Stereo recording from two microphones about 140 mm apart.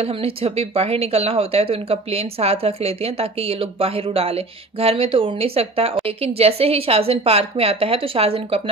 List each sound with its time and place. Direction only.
0.0 s speech: 45° right (ahead or behind)